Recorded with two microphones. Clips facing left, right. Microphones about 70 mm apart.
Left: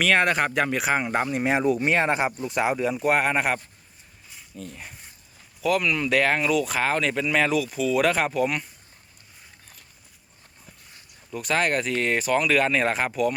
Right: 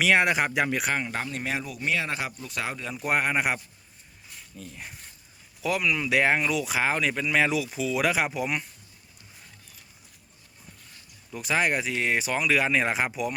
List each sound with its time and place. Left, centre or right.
0.0 s speech: centre
0.9 s speech: centre
2.9 s a man's voice: centre
4.3 s a sound: centre
5.6 s speech: centre
11.3 s speech: centre